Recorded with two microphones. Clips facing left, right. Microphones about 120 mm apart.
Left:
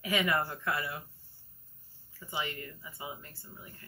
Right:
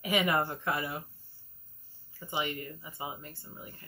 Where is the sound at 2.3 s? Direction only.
20° right (ahead or behind).